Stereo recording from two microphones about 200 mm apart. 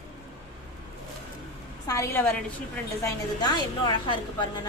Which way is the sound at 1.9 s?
15° left (ahead or behind).